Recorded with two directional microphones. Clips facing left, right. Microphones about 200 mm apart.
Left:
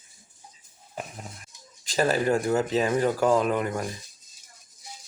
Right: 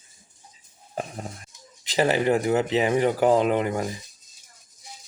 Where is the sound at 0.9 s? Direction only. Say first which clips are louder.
Right 5 dB; 40° right (ahead or behind).